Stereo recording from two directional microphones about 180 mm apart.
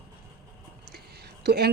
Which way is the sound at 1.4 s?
60° right (ahead or behind).